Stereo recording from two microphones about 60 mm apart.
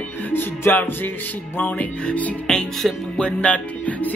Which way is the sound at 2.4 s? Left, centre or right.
Centre.